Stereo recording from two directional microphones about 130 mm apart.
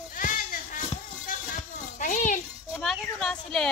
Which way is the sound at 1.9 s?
80° left.